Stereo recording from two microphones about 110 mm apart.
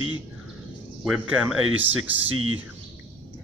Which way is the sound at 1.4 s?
15° right (ahead or behind).